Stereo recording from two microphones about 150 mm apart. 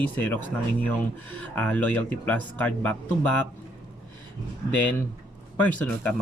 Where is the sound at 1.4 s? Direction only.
10° left (ahead or behind).